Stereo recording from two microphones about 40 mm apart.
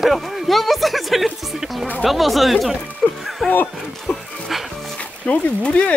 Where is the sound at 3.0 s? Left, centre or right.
Left.